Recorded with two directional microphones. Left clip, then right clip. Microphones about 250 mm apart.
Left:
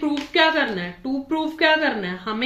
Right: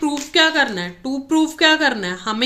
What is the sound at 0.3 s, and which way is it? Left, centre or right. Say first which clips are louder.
A woman's voice: right 3 dB; right.